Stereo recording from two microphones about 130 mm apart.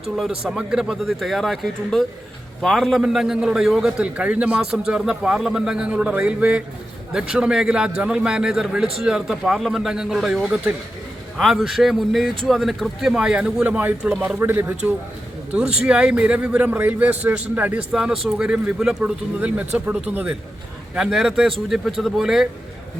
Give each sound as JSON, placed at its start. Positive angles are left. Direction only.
{"t": 0.2, "sound": "a man's voice", "side_deg": -5}
{"t": 15.5, "sound": "a man's voice", "side_deg": -10}